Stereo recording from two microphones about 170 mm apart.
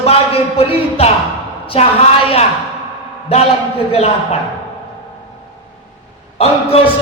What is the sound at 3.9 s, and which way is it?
Speech, 35° left (ahead or behind).